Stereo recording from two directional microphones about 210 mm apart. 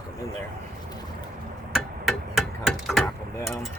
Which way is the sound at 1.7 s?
Centre (ahead or behind).